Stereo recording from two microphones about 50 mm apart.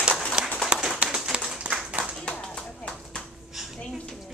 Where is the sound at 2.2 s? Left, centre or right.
Centre.